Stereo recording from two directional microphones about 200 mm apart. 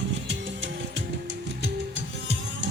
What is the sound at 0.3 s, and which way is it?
Music, 65° right (ahead or behind).